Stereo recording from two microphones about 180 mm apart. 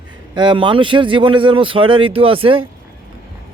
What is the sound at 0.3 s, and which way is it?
Speech, 25° right (ahead or behind).